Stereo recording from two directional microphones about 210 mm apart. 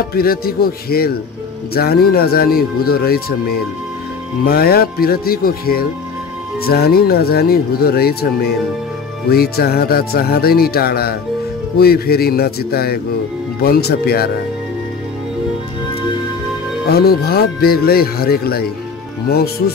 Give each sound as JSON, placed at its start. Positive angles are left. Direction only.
{"t": 0.1, "sound": "speech", "side_deg": 45}
{"t": 16.9, "sound": "speech", "side_deg": 45}